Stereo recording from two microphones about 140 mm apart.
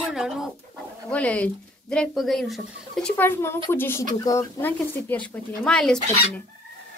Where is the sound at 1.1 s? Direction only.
10° left (ahead or behind).